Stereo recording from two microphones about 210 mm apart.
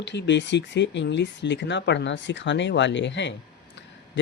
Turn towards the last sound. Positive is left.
turn(degrees=60)  # may be behind; listen again after turning